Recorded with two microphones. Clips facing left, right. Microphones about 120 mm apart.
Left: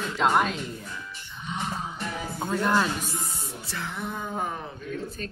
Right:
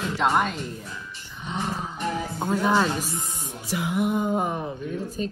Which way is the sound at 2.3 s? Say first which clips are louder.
Right 2 dB; 5° right (ahead or behind).